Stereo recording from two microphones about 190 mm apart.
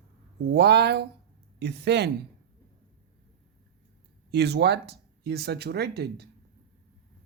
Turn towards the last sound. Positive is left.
turn(degrees=-60)  # may be behind; listen again after turning